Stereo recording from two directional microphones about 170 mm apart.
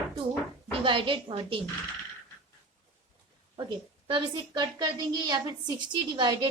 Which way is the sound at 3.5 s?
30° right (ahead or behind).